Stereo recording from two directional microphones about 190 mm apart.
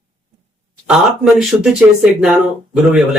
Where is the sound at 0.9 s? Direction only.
Centre (ahead or behind).